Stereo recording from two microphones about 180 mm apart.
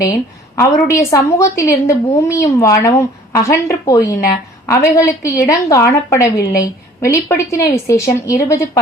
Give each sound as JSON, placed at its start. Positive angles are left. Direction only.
{"t": 0.0, "sound": "a woman's voice", "side_deg": 15}